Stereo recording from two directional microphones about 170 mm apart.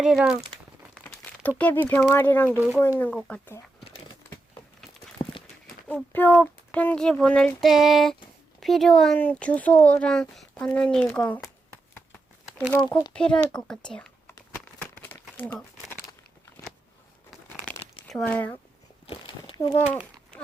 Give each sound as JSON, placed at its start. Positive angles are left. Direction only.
{"t": 0.0, "sound": "speech", "side_deg": -5}
{"t": 0.9, "sound": "speech", "side_deg": 10}
{"t": 2.6, "sound": "speech", "side_deg": -10}
{"t": 3.0, "sound": "speech", "side_deg": 5}
{"t": 3.8, "sound": "a sound", "side_deg": 30}
{"t": 5.1, "sound": "clip-clop", "side_deg": 30}
{"t": 5.9, "sound": "speech", "side_deg": 10}
{"t": 13.1, "sound": "speech", "side_deg": 5}
{"t": 14.3, "sound": "crumpling", "side_deg": 10}
{"t": 18.1, "sound": "speech", "side_deg": 5}
{"t": 19.0, "sound": "a sound", "side_deg": 30}